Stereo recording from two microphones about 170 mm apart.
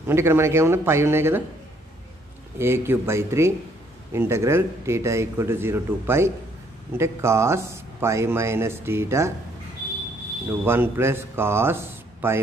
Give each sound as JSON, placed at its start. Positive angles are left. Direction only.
{"t": 0.1, "sound": "speech", "side_deg": -15}
{"t": 2.6, "sound": "speech", "side_deg": -15}
{"t": 10.6, "sound": "speech", "side_deg": -15}